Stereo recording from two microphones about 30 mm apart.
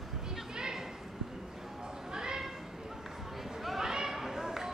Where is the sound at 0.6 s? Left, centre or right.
Right.